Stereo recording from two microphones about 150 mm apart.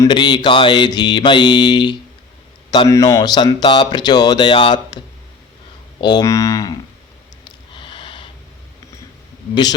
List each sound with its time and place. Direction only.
0.1 s mantra: 30° left (ahead or behind)
2.6 s a sound: 35° left (ahead or behind)
2.9 s speech: 25° left (ahead or behind)
7.7 s snort: 35° left (ahead or behind)